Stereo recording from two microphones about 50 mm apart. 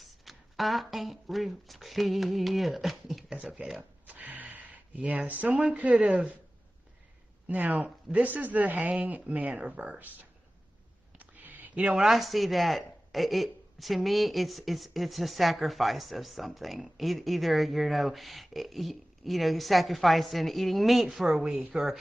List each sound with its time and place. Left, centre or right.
0.0 s speech: centre
4.1 s speech: right
7.4 s speech: right
11.1 s a sound: right
11.8 s speech: centre